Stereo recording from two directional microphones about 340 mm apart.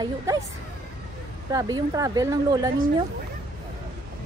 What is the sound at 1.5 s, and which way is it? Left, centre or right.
Speech, centre.